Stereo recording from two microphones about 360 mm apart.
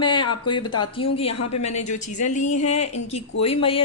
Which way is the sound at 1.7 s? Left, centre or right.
Centre.